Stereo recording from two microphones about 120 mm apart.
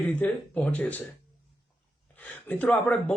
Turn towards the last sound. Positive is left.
turn(degrees=10)  # may be behind; listen again after turning